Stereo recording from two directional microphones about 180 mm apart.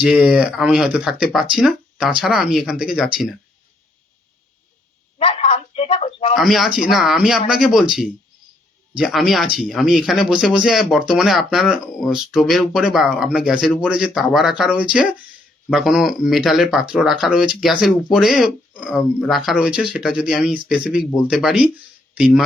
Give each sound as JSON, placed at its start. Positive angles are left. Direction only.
{"t": 0.0, "sound": "speech", "side_deg": -5}
{"t": 5.2, "sound": "a sound", "side_deg": 30}
{"t": 6.3, "sound": "speech", "side_deg": 0}